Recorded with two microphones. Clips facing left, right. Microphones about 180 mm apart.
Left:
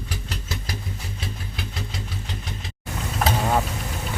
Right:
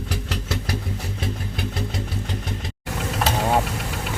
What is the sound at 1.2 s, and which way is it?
Vehicle, 50° right (ahead or behind).